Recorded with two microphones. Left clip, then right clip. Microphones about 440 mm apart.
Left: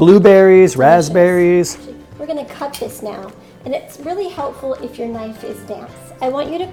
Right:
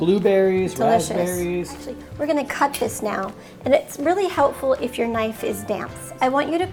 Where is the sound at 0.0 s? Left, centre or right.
Left.